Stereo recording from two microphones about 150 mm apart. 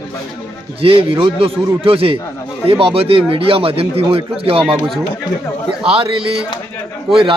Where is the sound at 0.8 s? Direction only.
35° right (ahead or behind).